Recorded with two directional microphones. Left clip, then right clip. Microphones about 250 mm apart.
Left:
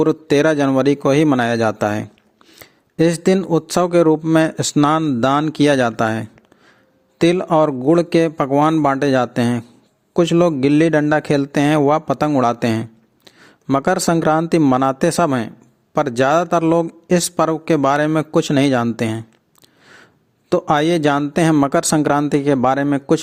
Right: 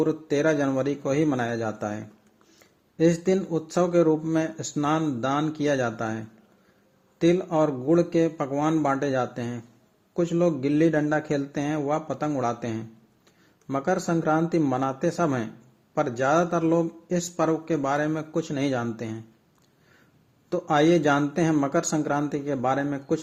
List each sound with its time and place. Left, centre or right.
0.0 s a man's voice: left
20.5 s a man's voice: left